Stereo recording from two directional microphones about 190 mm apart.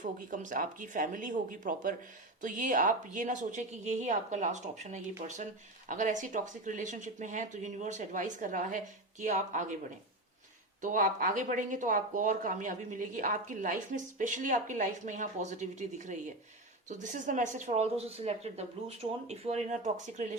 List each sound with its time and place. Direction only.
0.0 s speech: 45° right (ahead or behind)
10.8 s speech: 45° right (ahead or behind)